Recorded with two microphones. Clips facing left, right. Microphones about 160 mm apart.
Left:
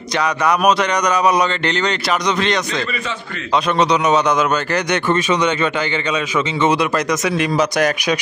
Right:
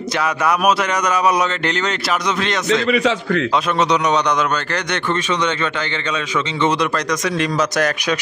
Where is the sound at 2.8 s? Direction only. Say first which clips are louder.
Right 8 dB; 90° right.